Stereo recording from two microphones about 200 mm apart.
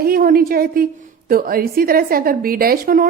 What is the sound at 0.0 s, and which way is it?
A woman's voice, 45° right (ahead or behind).